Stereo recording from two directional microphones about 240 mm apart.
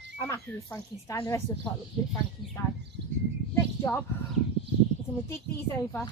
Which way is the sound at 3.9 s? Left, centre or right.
Centre.